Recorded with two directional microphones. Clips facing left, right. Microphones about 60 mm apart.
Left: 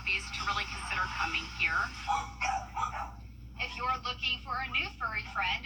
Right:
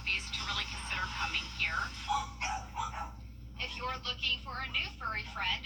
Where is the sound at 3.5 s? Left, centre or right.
Left.